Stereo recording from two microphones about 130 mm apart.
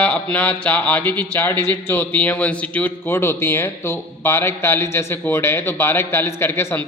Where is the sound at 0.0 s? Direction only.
10° left (ahead or behind).